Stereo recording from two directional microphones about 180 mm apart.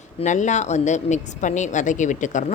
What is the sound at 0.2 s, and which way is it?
Speech, 40° left (ahead or behind).